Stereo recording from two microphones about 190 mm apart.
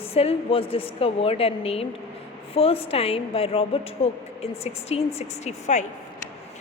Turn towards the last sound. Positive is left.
turn(degrees=35)  # may be behind; listen again after turning